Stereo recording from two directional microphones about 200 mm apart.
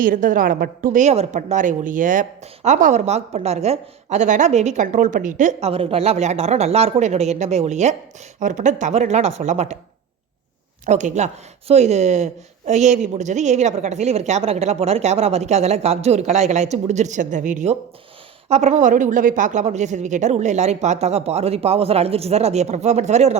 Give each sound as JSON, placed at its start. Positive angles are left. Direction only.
{"t": 0.0, "sound": "a woman's voice", "side_deg": -40}
{"t": 10.8, "sound": "a woman's voice", "side_deg": -35}